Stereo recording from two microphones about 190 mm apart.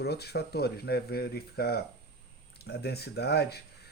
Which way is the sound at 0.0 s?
60° left (ahead or behind).